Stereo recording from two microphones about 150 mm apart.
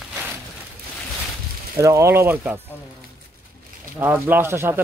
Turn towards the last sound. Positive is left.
turn(degrees=-15)  # may be behind; listen again after turning